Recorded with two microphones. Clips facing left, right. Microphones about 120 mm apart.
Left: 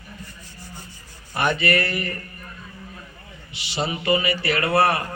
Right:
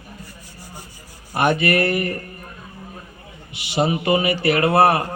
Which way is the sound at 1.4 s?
50° right (ahead or behind).